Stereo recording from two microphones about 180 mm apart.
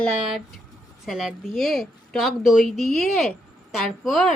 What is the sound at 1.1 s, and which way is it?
A woman's voice, centre (ahead or behind).